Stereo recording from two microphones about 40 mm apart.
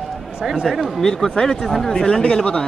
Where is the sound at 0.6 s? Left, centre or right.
Centre; by 2.6 s left.